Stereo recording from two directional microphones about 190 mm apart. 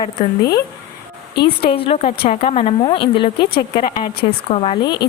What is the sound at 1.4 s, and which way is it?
Speech, 30° left (ahead or behind).